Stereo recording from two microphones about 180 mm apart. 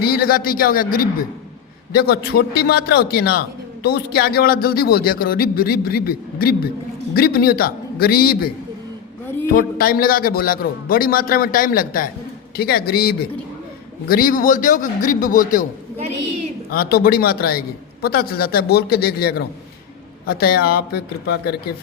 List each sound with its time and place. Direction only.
0.0 s a man's voice: 55° left (ahead or behind)
9.5 s a man's voice: 55° left (ahead or behind)
16.7 s speech: 55° left (ahead or behind)